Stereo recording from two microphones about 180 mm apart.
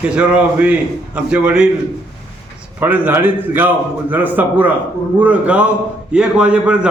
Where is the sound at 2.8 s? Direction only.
10° right (ahead or behind).